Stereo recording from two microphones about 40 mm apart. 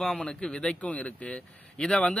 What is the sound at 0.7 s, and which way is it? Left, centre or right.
Speech, left.